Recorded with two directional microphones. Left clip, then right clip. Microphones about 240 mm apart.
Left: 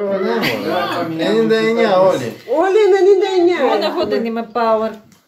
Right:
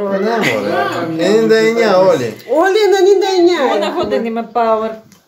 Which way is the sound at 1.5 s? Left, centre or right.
Right.